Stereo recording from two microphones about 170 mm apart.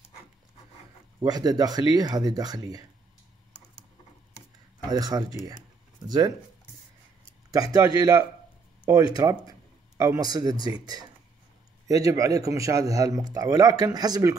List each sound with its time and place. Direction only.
1.2 s a man's voice: 25° right (ahead or behind)
4.8 s a man's voice: 20° right (ahead or behind)
7.7 s a man's voice: 20° right (ahead or behind)